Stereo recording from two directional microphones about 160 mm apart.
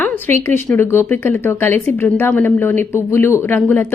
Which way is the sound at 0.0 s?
10° left (ahead or behind).